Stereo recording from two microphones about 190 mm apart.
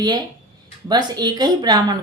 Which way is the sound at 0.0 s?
20° right (ahead or behind).